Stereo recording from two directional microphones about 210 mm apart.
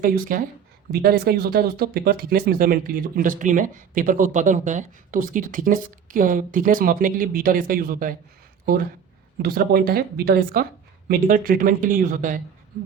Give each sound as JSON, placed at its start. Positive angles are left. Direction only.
{"t": 0.0, "sound": "speech", "side_deg": -40}